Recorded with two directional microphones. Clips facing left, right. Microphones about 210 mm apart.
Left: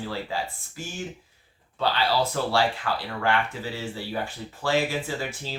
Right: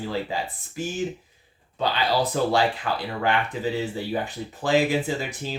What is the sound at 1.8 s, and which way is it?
Speech, 15° right (ahead or behind).